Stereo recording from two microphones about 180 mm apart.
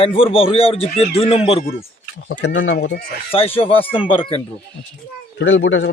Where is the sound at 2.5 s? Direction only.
90° left.